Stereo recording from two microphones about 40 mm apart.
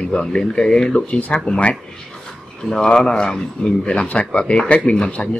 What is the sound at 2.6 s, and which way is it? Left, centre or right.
Speech, centre.